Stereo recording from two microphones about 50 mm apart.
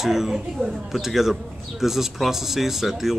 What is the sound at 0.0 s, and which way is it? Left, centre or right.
Speech, centre.